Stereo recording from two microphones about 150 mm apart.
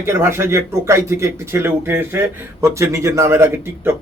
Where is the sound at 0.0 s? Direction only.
15° right (ahead or behind).